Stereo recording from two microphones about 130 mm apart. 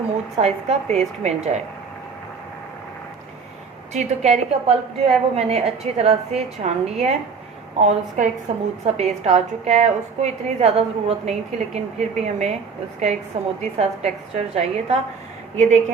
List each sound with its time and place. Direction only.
0.3 s a woman's voice: 55° right (ahead or behind)
3.9 s a woman's voice: 60° right (ahead or behind)
7.8 s a woman's voice: 65° right (ahead or behind)